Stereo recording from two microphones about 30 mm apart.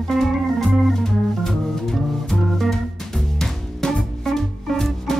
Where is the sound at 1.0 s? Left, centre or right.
Centre.